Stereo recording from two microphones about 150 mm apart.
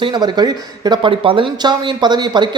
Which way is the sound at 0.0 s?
30° right (ahead or behind).